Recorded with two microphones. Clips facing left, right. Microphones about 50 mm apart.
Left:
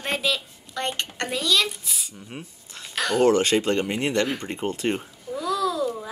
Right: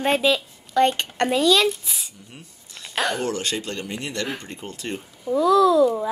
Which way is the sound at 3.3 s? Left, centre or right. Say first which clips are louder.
Left 7 dB; left.